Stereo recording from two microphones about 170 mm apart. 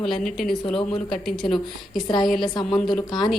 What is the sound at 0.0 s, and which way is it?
A woman's voice, centre (ahead or behind).